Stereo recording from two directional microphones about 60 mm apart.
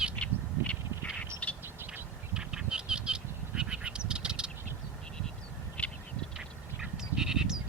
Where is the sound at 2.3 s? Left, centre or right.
Centre.